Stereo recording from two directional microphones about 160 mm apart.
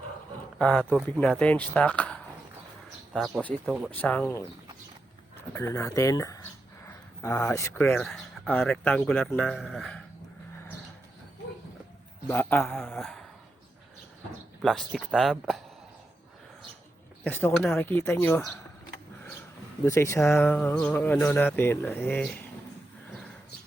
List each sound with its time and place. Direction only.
0.6 s mantra: 5° left (ahead or behind)
3.1 s a man's voice: centre (ahead or behind)
3.9 s mantra: 10° left (ahead or behind)
5.4 s a man's voice: 15° left (ahead or behind); by 10.0 s centre (ahead or behind)
12.3 s mantra: 10° left (ahead or behind)
14.6 s a man's voice: 5° left (ahead or behind)
17.2 s mantra: 10° left (ahead or behind)
19.9 s speech: 20° left (ahead or behind)
20.3 s mantra: 10° left (ahead or behind)